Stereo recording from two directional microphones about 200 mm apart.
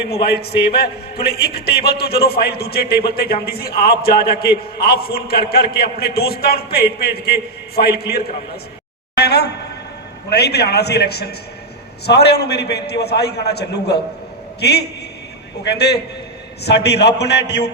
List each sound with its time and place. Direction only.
0.0 s a man's voice: 55° left (ahead or behind)